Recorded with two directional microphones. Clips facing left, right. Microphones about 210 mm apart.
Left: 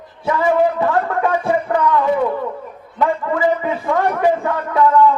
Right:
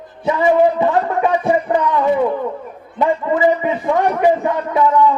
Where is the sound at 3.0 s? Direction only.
20° right (ahead or behind).